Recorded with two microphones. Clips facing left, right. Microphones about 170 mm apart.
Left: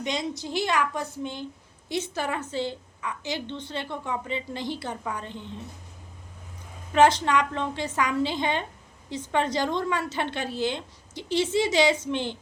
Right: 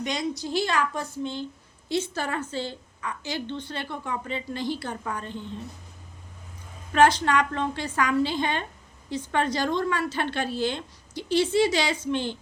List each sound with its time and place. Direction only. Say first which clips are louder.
0.0 s a woman's voice: right 1 dB; 20° left (ahead or behind)
6.9 s a woman's voice: even; 20° left (ahead or behind)